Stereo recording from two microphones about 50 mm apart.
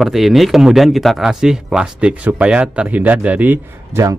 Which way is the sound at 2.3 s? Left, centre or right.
Right.